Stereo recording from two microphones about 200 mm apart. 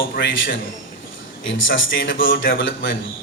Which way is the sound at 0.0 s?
70° left (ahead or behind).